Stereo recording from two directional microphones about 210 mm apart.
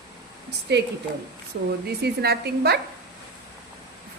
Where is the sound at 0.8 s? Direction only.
50° right (ahead or behind).